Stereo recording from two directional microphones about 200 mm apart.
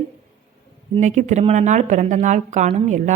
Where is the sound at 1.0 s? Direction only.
35° right (ahead or behind).